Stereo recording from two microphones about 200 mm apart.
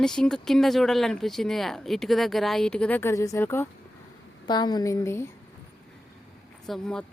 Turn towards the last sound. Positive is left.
turn(degrees=5)  # may be behind; listen again after turning